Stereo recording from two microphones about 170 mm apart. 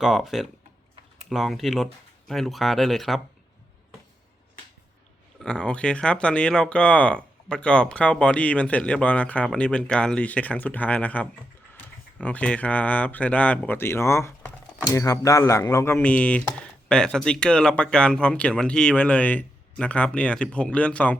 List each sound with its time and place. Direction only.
0.0 s speech: centre (ahead or behind)
5.4 s speech: 5° left (ahead or behind)